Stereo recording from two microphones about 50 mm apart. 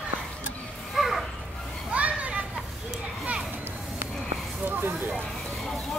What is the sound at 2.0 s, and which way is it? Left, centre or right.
Children playing, right.